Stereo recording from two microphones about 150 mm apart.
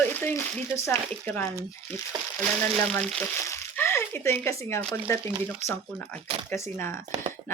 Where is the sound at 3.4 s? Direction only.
15° left (ahead or behind).